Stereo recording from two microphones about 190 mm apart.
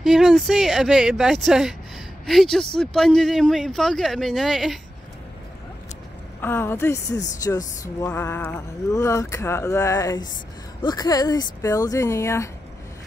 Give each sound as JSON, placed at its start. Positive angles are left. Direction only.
{"t": 0.0, "sound": "speech", "side_deg": 0}
{"t": 6.4, "sound": "speech", "side_deg": 10}